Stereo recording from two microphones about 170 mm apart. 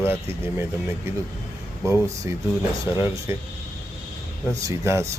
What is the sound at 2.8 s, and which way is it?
Speech, 15° right (ahead or behind).